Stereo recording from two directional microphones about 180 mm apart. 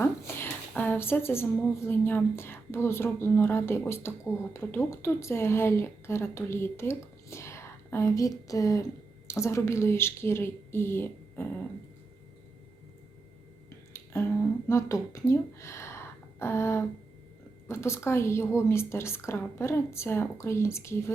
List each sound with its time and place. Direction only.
0.0 s a woman's voice: 10° left (ahead or behind)
13.9 s a sound: 15° left (ahead or behind)
14.7 s a woman's voice: 15° left (ahead or behind)